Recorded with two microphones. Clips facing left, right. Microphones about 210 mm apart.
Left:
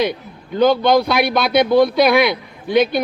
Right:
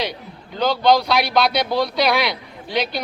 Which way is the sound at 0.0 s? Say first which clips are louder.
Left 7 dB; 55° left (ahead or behind).